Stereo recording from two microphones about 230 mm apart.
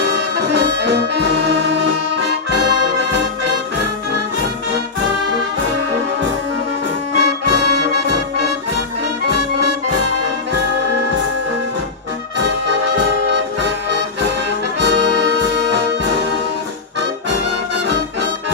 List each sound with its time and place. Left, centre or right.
0.5 s brass instrument: right
2.6 s brass instrument: right
7.2 s brass instrument: right
9.3 s music: right
14.8 s music: right